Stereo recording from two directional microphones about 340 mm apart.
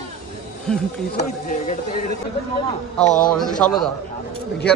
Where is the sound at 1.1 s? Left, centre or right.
Left.